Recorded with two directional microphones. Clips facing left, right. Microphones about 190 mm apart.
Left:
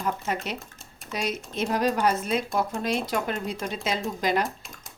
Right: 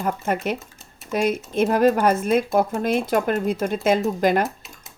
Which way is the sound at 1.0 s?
50° right (ahead or behind).